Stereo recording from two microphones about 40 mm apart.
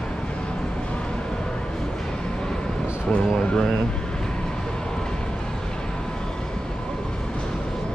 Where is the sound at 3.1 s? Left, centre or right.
Left.